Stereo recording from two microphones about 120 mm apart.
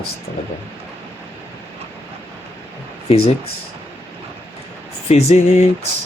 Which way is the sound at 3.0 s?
55° left (ahead or behind).